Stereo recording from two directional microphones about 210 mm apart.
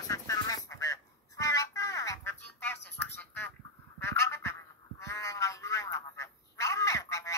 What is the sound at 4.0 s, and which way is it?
Honk, 10° left (ahead or behind).